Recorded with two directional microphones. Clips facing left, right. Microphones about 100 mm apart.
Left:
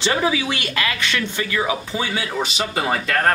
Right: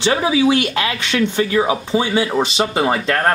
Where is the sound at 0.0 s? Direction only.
15° right (ahead or behind).